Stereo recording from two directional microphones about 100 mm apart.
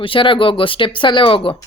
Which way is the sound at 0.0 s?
60° left (ahead or behind).